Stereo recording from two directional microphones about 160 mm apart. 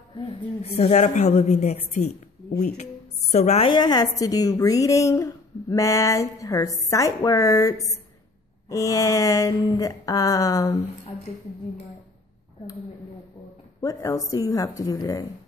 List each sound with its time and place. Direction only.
0.1 s a woman's voice: 35° left (ahead or behind)
3.6 s a woman's voice: 25° left (ahead or behind)
13.7 s a woman's voice: 20° left (ahead or behind)